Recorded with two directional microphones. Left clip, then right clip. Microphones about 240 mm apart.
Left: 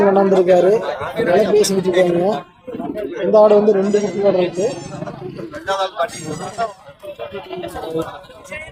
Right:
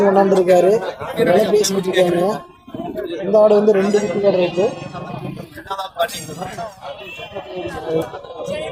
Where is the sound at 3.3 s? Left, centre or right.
Centre.